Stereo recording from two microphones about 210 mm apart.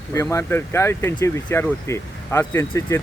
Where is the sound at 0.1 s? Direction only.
15° left (ahead or behind).